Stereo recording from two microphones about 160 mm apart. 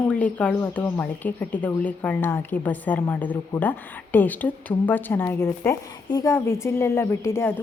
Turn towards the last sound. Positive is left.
turn(degrees=15)  # may be behind; listen again after turning